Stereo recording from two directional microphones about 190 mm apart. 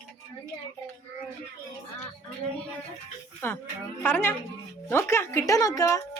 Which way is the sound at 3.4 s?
10° left (ahead or behind).